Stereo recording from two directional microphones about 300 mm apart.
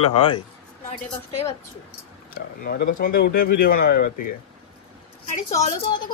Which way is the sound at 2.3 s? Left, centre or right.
Left.